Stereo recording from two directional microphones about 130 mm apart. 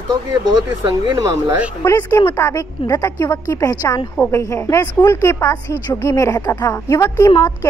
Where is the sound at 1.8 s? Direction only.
20° left (ahead or behind).